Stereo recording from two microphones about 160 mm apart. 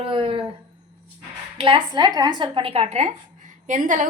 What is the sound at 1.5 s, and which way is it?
Speech, 30° right (ahead or behind).